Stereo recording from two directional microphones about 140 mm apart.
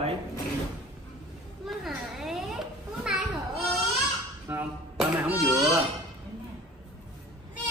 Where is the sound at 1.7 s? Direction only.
Centre (ahead or behind).